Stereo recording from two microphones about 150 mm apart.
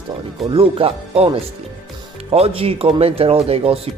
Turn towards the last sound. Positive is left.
turn(degrees=-40)  # may be behind; listen again after turning